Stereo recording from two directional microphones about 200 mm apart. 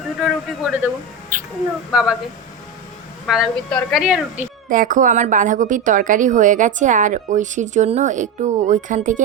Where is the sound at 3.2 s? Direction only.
Centre (ahead or behind).